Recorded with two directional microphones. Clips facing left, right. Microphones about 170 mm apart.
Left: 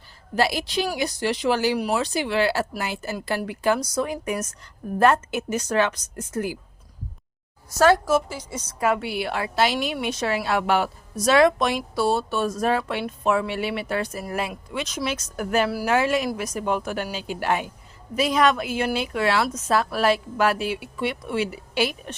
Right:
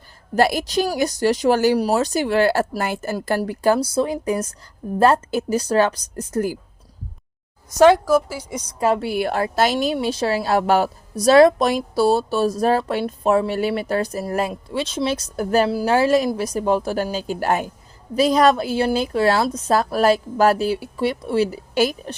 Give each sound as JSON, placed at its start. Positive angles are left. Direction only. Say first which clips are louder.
{"t": 0.3, "sound": "a woman's voice", "louder": "right 5 dB", "side_deg": -50}
{"t": 8.3, "sound": "a woman's voice", "louder": "right 4 dB", "side_deg": -10}
{"t": 8.8, "sound": "a woman's voice", "louder": "right 3 dB", "side_deg": -30}
{"t": 9.0, "sound": "a woman's voice", "louder": "right 6 dB", "side_deg": -45}
{"t": 9.7, "sound": "speech", "louder": "right 5 dB", "side_deg": -30}